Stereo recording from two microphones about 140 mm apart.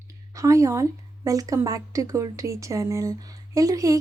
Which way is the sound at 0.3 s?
25° right (ahead or behind).